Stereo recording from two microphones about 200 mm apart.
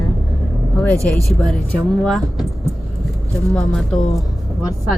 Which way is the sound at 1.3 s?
Centre (ahead or behind).